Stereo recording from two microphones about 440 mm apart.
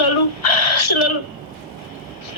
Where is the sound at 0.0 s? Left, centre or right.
Left.